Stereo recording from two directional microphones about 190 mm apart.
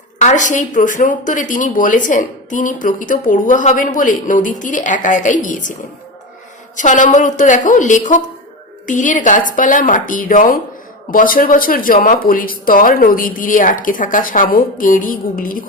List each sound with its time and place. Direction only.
0.2 s speech: 40° left (ahead or behind)
6.7 s a woman's voice: 40° left (ahead or behind)